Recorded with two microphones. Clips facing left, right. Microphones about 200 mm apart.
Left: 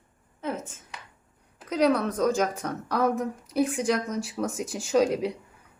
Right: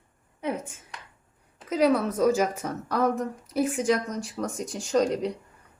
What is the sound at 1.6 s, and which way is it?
A woman's voice, 5° right (ahead or behind).